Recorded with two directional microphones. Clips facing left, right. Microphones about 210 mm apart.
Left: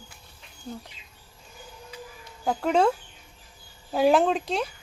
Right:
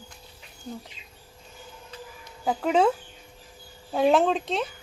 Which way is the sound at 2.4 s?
5° right (ahead or behind).